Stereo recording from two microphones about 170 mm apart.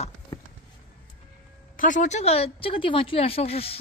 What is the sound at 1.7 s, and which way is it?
A woman's voice, 50° left (ahead or behind).